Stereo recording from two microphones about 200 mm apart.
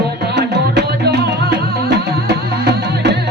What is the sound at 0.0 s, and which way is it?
Music, 55° right (ahead or behind).